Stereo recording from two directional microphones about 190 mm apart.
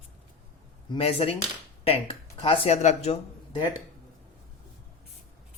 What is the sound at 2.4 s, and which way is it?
Speech, 30° left (ahead or behind).